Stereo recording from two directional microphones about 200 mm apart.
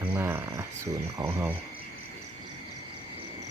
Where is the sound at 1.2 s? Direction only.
10° right (ahead or behind).